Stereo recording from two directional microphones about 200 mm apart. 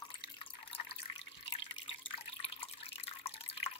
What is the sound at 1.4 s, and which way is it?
Drip, 25° left (ahead or behind).